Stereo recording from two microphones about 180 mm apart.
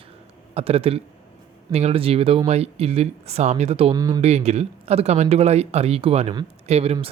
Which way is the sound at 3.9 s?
20° right (ahead or behind).